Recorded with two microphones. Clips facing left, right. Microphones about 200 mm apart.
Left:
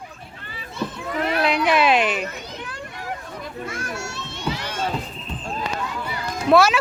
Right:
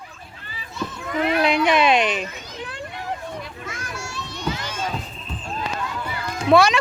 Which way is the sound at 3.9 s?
25° left (ahead or behind).